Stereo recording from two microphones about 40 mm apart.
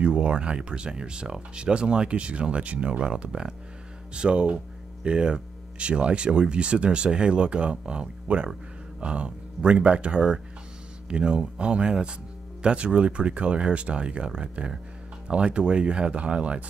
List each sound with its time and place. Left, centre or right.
0.0 s speech: right